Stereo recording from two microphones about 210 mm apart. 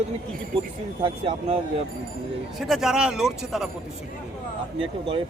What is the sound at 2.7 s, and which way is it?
A man's voice, centre (ahead or behind).